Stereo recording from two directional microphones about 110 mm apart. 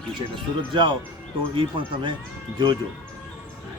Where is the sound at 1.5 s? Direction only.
50° right (ahead or behind).